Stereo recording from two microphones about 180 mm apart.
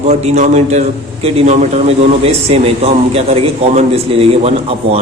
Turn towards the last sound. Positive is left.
turn(degrees=-35)  # may be behind; listen again after turning